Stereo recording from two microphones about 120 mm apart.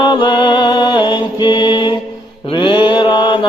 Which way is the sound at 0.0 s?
40° left (ahead or behind).